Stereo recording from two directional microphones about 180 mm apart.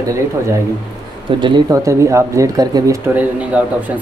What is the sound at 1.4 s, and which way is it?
Speech, 20° right (ahead or behind).